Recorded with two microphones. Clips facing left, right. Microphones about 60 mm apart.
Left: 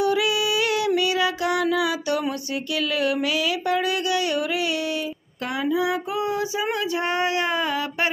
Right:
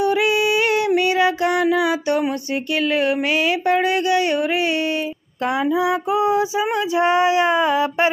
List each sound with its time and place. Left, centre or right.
0.0 s female singing: right
5.4 s child singing: right